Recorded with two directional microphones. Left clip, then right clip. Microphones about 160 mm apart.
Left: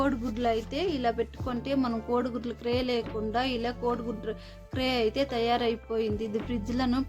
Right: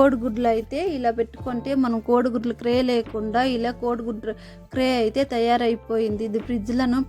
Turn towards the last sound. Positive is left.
turn(degrees=-35)  # may be behind; listen again after turning